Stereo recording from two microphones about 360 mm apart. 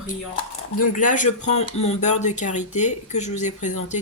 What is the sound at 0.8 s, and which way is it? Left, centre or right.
Speech, left.